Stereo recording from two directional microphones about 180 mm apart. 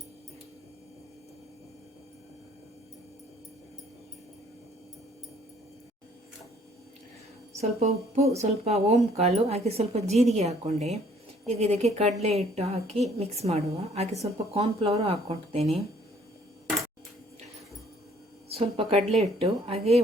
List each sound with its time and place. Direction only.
7.6 s speech: 35° right (ahead or behind)
18.5 s speech: 35° right (ahead or behind)